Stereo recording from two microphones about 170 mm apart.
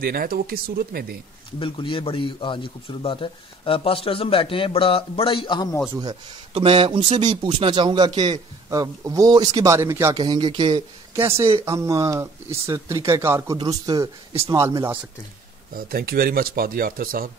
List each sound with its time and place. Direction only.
0.0 s speech: 60° right (ahead or behind)
1.6 s a man's voice: 30° left (ahead or behind)
5.9 s speech: 30° right (ahead or behind)
15.7 s speech: 60° right (ahead or behind)